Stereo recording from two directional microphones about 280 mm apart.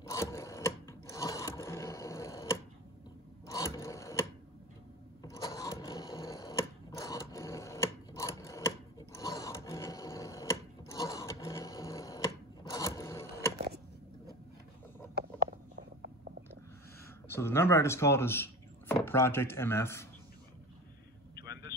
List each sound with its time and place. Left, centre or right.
0.0 s sewing machine: centre
3.4 s wood: centre
5.2 s sewing machine: centre
17.3 s speech: centre
21.4 s vehicle: left